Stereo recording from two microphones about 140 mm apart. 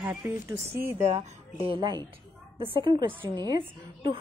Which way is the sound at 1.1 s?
45° right (ahead or behind).